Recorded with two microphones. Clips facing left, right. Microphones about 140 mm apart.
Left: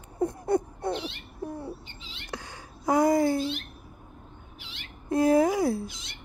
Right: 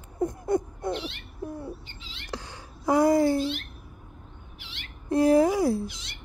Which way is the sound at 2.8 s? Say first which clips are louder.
Right 1 dB; 20° left (ahead or behind).